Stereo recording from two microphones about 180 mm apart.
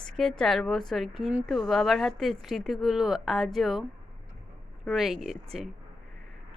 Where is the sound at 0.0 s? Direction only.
5° left (ahead or behind).